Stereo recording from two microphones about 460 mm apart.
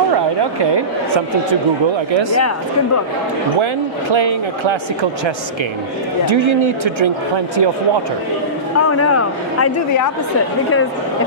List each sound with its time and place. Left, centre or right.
0.1 s a sound: right
3.6 s speech: right
6.3 s speech: right
8.7 s speech: left